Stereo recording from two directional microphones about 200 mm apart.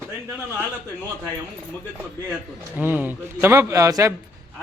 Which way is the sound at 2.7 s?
10° right (ahead or behind).